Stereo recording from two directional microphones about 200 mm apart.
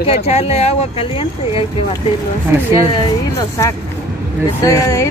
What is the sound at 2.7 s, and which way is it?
Speech, 20° left (ahead or behind).